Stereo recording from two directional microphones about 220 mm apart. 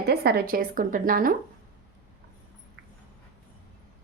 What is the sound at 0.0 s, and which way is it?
A woman's voice, 45° right (ahead or behind).